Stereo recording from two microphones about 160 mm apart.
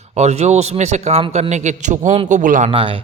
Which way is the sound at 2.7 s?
35° right (ahead or behind).